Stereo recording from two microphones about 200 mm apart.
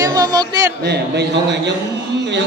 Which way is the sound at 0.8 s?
55° right (ahead or behind).